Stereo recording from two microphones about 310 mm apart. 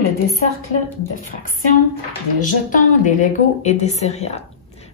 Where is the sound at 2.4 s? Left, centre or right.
Left.